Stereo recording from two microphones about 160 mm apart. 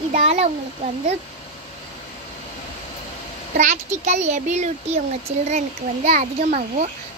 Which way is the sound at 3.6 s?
50° right (ahead or behind).